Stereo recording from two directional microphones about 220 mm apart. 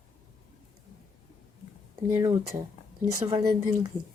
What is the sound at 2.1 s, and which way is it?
Speech, 15° right (ahead or behind).